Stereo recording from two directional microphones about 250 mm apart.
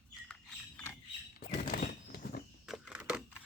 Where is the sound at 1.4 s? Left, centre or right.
Left.